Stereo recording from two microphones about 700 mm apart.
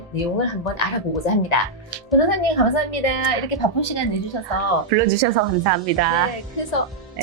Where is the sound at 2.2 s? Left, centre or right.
Left.